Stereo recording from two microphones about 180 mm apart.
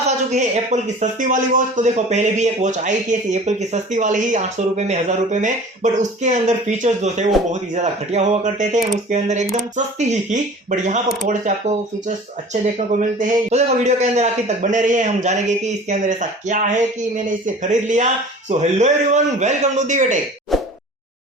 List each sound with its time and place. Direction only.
0.3 s speech: 40° right (ahead or behind)
13.0 s speech: 45° right (ahead or behind)